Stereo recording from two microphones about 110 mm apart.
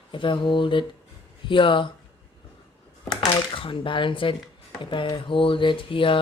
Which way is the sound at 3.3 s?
50° left (ahead or behind).